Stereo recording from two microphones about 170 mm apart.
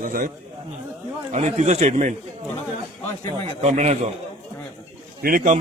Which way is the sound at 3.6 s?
40° right (ahead or behind).